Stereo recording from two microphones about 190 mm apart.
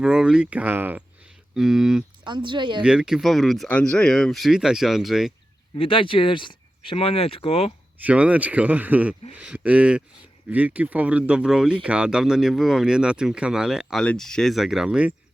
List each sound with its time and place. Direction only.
0.0 s speech: 5° right (ahead or behind)
2.2 s speech: 25° right (ahead or behind)
2.8 s speech: 5° right (ahead or behind)
5.7 s speech: 30° left (ahead or behind)
8.0 s speech: 5° right (ahead or behind)